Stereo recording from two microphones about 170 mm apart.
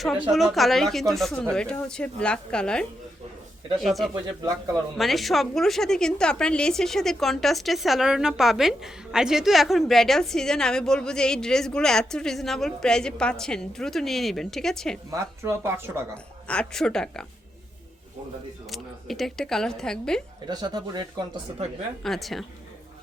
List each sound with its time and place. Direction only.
0.0 s a woman's voice: centre (ahead or behind)
4.1 s speech: 20° right (ahead or behind)
4.9 s a woman's voice: centre (ahead or behind)
15.1 s speech: 15° right (ahead or behind)
16.1 s a woman's voice: 5° left (ahead or behind)
18.7 s a woman's voice: centre (ahead or behind)
20.5 s speech: 25° right (ahead or behind)
22.0 s a woman's voice: centre (ahead or behind)